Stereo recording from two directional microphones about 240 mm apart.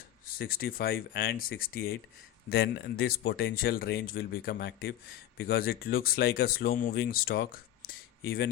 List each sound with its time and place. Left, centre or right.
0.3 s speech: left